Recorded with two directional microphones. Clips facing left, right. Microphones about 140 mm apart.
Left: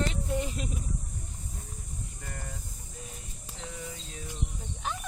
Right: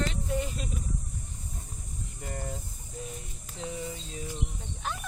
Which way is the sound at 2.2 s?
25° right (ahead or behind).